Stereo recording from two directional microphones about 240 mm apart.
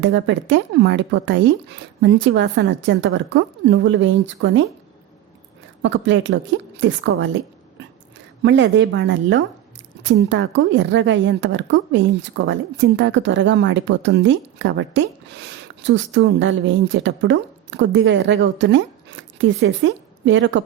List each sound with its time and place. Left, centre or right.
0.0 s a woman's voice: right
5.8 s a woman's voice: right